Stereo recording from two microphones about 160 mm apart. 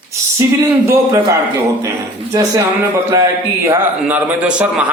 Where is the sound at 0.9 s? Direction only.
15° right (ahead or behind).